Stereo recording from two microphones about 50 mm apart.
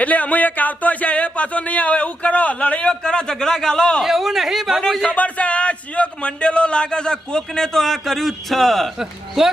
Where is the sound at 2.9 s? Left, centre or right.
Centre.